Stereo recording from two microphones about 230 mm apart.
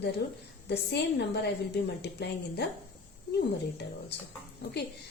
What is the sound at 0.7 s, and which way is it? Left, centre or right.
A woman's voice, left.